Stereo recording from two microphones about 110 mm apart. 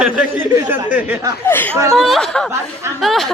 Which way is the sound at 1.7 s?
30° right (ahead or behind).